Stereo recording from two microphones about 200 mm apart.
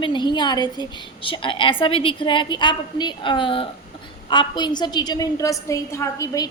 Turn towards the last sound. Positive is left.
turn(degrees=15)  # may be behind; listen again after turning